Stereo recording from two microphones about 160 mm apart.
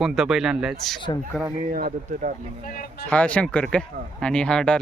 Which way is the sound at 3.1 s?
10° left (ahead or behind).